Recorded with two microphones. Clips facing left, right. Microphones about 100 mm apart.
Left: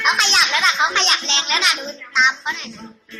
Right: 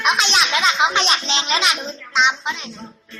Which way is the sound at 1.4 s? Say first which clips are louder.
Right 1 dB; 30° right (ahead or behind).